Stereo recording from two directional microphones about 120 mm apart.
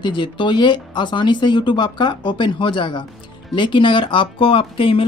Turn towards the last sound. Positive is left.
turn(degrees=50)  # may be behind; listen again after turning